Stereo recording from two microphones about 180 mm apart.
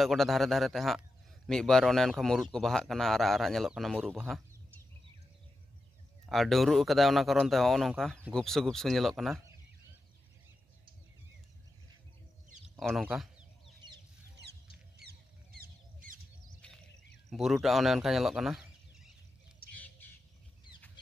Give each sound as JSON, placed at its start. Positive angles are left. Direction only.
{"t": 0.0, "sound": "a man's voice", "side_deg": 0}
{"t": 6.2, "sound": "a man's voice", "side_deg": 0}
{"t": 12.7, "sound": "a man's voice", "side_deg": 0}
{"t": 15.0, "sound": "a sound", "side_deg": -60}
{"t": 17.3, "sound": "speech", "side_deg": 0}
{"t": 19.7, "sound": "bird", "side_deg": 10}